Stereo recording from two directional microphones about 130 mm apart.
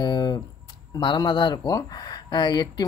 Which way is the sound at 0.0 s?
30° left (ahead or behind).